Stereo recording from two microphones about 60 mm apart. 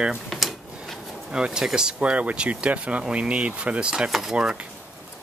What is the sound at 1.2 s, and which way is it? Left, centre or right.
Speech, centre.